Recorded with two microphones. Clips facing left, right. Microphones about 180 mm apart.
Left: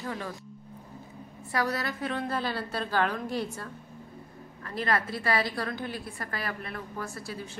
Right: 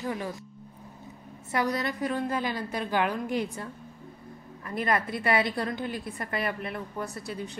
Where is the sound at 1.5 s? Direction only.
20° right (ahead or behind).